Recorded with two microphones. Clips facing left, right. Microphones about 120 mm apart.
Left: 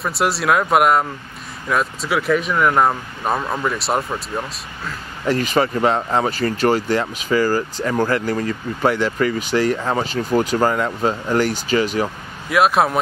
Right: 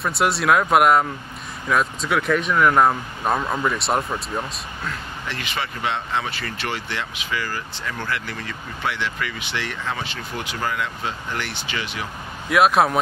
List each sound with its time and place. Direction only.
0.0 s speech: centre (ahead or behind)
5.2 s speech: 40° left (ahead or behind)
12.4 s speech: centre (ahead or behind)